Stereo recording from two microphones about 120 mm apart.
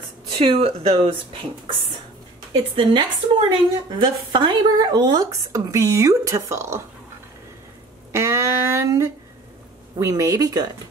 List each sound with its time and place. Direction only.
0.4 s a woman's voice: 55° right (ahead or behind); by 6.8 s 25° right (ahead or behind)
8.1 s speech: 25° right (ahead or behind)